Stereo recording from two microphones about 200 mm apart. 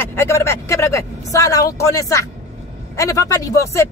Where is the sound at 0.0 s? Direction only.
10° left (ahead or behind).